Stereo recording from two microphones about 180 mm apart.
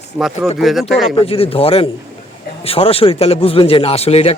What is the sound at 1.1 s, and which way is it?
Speech, 35° left (ahead or behind).